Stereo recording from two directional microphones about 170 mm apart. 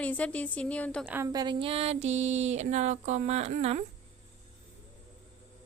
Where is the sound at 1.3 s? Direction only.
25° right (ahead or behind).